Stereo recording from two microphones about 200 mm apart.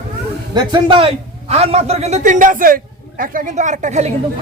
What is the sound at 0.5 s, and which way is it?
A man's voice, 25° right (ahead or behind).